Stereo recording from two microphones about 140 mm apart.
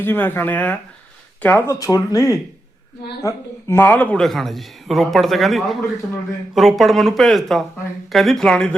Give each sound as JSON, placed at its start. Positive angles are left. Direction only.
{"t": 0.0, "sound": "a man's voice", "side_deg": 15}